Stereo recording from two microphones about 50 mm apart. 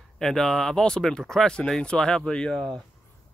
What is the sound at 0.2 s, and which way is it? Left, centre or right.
Speech, centre.